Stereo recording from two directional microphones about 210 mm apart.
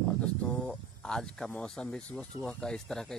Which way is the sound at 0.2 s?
5° left (ahead or behind).